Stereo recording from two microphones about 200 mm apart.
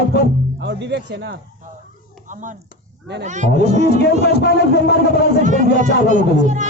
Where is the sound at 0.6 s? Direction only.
60° right (ahead or behind).